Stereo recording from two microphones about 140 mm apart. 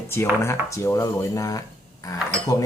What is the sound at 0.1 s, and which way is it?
Speech, 20° left (ahead or behind).